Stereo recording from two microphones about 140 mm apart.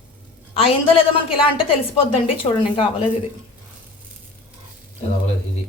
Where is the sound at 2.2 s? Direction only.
40° left (ahead or behind).